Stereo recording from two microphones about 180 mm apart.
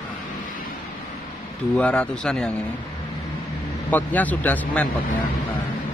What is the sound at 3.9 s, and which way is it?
Speech, 10° left (ahead or behind).